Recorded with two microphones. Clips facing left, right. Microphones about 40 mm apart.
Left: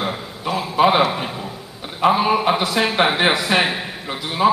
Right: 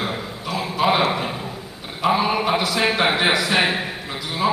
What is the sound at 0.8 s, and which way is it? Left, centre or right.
Speech, left.